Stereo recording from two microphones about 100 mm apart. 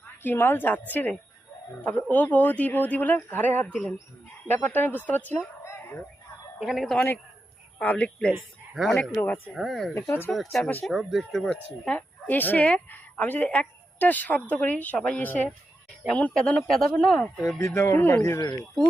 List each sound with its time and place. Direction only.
0.2 s a woman's voice: 20° left (ahead or behind)
6.6 s speech: centre (ahead or behind)
7.8 s speech: 15° left (ahead or behind)
9.5 s speech: centre (ahead or behind)
9.9 s a woman's voice: 25° left (ahead or behind)
10.3 s speech: centre (ahead or behind)
17.6 s a woman's voice: 25° left (ahead or behind)